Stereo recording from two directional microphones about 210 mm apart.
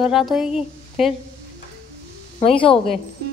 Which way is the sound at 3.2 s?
50° right (ahead or behind).